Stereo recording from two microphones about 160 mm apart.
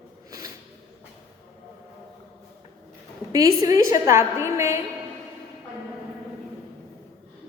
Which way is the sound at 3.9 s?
50° left (ahead or behind).